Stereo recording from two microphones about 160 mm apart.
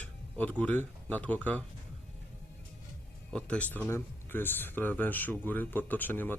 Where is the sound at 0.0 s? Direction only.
10° left (ahead or behind).